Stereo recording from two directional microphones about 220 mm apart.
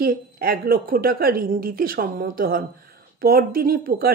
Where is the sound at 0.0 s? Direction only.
40° right (ahead or behind).